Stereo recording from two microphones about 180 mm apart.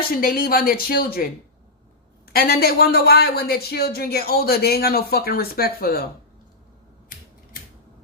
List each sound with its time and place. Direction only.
0.1 s speech: 55° left (ahead or behind)